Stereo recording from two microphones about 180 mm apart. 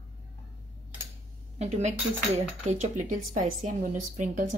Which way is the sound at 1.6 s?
40° right (ahead or behind).